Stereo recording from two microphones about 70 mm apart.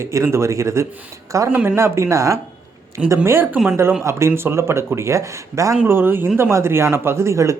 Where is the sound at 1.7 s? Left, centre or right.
Right.